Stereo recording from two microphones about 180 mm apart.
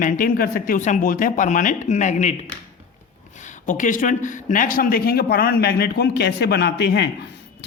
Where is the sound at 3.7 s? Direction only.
45° left (ahead or behind).